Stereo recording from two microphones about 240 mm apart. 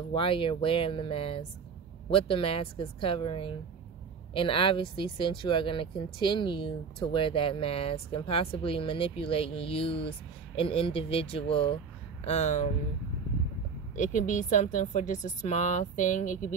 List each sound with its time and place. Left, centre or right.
0.1 s speech: left
13.9 s a woman's voice: left